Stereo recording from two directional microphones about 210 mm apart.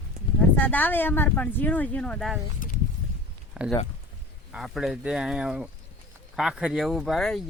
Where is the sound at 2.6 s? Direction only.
40° left (ahead or behind).